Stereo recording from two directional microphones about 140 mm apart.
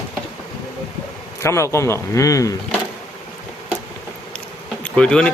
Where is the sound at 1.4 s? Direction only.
20° left (ahead or behind).